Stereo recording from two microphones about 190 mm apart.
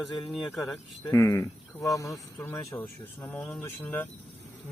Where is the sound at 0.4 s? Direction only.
Centre (ahead or behind).